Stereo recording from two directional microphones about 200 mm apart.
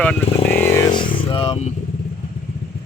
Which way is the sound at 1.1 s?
25° left (ahead or behind).